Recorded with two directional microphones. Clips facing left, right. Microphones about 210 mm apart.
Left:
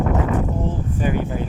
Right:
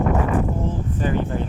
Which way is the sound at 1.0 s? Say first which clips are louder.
Even; 10° left (ahead or behind).